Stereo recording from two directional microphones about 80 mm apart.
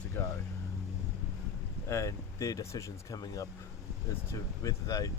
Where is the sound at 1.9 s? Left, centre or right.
Left.